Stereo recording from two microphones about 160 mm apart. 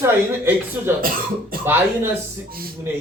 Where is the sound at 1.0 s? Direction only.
65° right (ahead or behind).